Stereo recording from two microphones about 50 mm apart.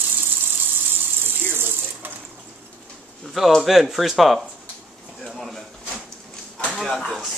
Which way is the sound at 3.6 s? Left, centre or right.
Centre.